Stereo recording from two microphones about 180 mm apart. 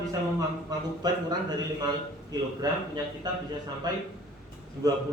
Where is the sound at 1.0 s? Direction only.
25° right (ahead or behind).